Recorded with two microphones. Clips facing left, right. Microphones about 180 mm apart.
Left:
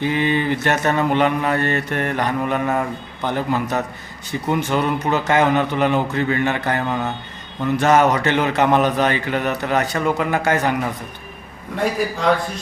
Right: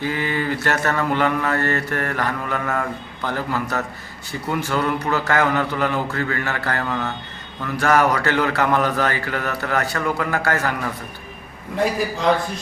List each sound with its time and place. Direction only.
0.0 s a man's voice: 20° left (ahead or behind)